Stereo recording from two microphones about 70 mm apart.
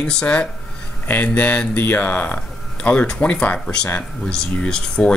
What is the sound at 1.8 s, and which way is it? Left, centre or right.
Speech, left.